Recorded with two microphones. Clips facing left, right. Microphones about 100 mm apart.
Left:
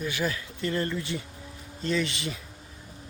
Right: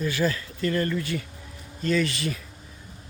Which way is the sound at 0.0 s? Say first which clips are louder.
Right 4 dB; 15° left (ahead or behind).